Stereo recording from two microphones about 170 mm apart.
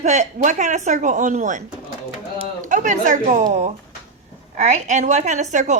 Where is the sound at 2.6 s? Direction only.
45° right (ahead or behind).